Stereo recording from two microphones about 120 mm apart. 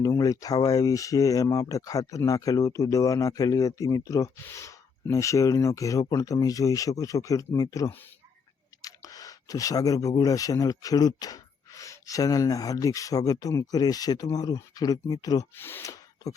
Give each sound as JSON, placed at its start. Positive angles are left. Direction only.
{"t": 0.0, "sound": "speech", "side_deg": 30}
{"t": 15.5, "sound": "speech", "side_deg": 20}